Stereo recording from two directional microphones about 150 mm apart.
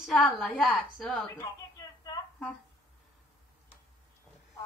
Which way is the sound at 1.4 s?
25° left (ahead or behind).